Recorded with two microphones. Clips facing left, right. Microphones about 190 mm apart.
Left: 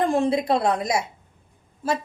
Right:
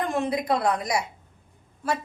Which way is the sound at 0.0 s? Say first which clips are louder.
Left 5 dB; 30° left (ahead or behind).